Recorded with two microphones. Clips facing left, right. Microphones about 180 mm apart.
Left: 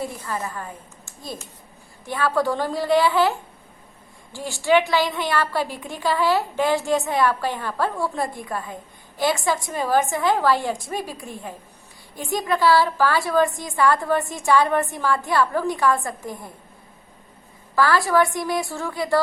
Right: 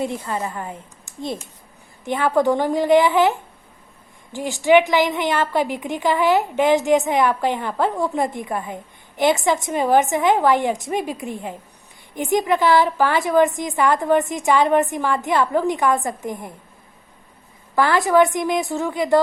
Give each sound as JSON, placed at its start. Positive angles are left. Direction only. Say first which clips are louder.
{"t": 0.0, "sound": "a woman's voice", "louder": "right 4 dB", "side_deg": -20}
{"t": 17.7, "sound": "a woman's voice", "louder": "right 3 dB", "side_deg": -20}